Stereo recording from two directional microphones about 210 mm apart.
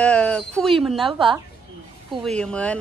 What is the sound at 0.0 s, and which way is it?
A woman's voice, 5° left (ahead or behind).